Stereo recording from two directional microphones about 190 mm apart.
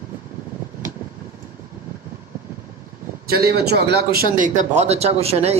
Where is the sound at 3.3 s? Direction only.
55° right (ahead or behind).